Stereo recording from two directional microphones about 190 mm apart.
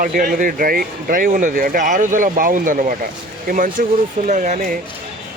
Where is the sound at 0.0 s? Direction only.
45° right (ahead or behind).